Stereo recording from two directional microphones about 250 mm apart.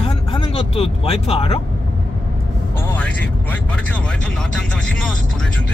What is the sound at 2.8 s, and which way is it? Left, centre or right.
Speech, centre.